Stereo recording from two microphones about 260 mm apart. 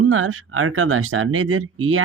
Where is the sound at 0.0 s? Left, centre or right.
Right.